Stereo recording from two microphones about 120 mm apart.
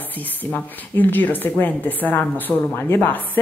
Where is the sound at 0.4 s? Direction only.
15° left (ahead or behind).